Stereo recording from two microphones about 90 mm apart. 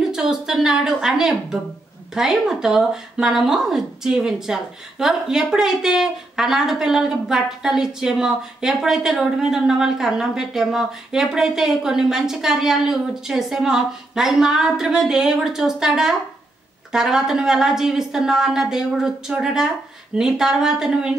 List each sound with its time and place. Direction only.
0.1 s speech: 5° right (ahead or behind)